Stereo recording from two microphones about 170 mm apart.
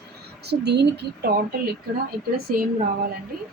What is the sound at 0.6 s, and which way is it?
Speech, 80° right.